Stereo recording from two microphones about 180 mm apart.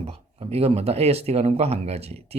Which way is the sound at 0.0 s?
35° right (ahead or behind).